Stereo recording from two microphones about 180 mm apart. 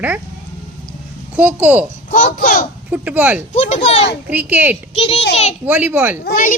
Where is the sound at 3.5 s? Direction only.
35° left (ahead or behind).